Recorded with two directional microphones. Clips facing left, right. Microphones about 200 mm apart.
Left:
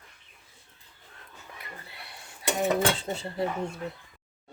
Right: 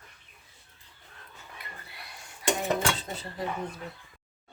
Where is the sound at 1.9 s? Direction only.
25° left (ahead or behind).